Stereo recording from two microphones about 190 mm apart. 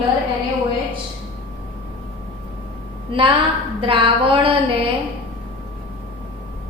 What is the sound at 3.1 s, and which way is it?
A woman's voice, 25° right (ahead or behind).